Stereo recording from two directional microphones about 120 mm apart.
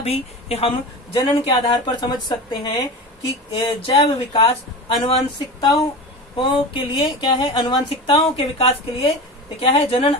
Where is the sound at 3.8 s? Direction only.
50° left (ahead or behind).